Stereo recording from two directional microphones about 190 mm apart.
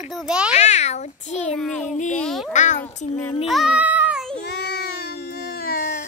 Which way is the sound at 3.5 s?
5° right (ahead or behind).